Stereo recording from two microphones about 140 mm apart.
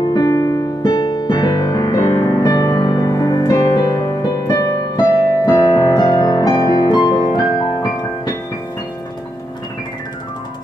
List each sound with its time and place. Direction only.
0.0 s music: 30° left (ahead or behind)